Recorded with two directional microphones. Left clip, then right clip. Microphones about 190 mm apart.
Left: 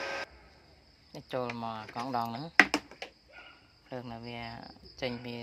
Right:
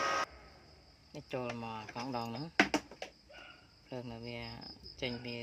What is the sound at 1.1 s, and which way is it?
Speech, 15° left (ahead or behind).